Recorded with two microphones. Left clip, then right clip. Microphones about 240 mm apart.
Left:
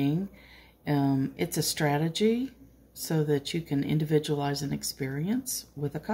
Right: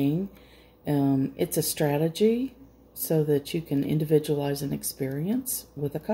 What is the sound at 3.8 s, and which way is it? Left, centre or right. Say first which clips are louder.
Speech: right 2 dB; left.